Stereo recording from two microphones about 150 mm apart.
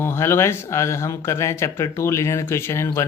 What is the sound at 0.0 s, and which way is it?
Speech, 15° left (ahead or behind).